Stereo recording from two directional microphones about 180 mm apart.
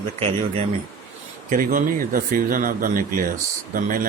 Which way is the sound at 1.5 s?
50° right (ahead or behind).